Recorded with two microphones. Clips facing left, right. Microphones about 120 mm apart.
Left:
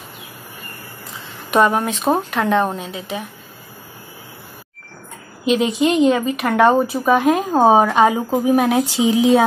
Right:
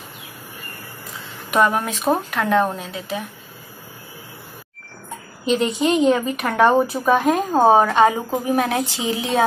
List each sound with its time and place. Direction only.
1.5 s speech: 20° left (ahead or behind)
2.0 s a woman's voice: centre (ahead or behind)
5.4 s a woman's voice: 5° left (ahead or behind)